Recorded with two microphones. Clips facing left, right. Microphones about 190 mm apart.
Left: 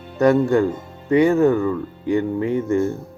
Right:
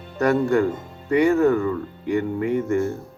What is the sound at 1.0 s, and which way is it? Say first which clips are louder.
Speech: left 2 dB; 30° left (ahead or behind).